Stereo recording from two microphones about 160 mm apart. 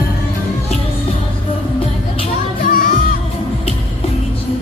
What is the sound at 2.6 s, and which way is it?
Music, 60° left (ahead or behind).